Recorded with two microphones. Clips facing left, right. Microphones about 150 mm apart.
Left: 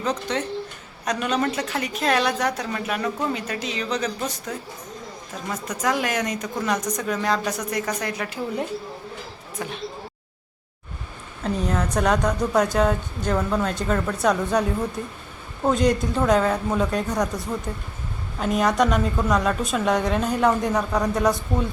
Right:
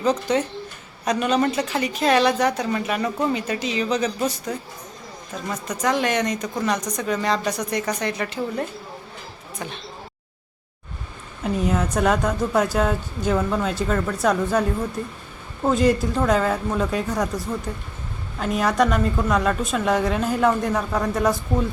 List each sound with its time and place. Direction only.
0.0 s a woman's voice: 5° right (ahead or behind)
11.4 s a woman's voice: 5° right (ahead or behind)